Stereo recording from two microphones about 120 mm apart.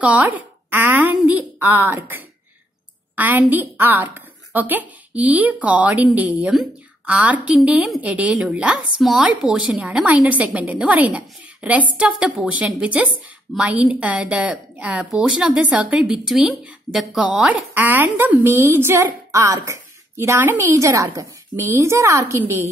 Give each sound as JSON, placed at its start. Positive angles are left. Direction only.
{"t": 0.0, "sound": "a woman's voice", "side_deg": -15}